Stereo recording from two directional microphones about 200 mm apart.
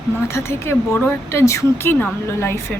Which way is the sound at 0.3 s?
15° left (ahead or behind).